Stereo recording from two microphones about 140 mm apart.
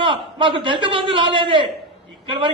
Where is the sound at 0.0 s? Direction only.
35° right (ahead or behind).